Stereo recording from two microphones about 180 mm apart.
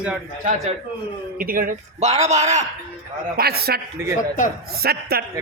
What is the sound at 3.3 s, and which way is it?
Speech, 60° right (ahead or behind).